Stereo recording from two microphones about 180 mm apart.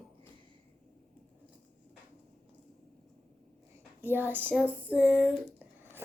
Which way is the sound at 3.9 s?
10° right (ahead or behind).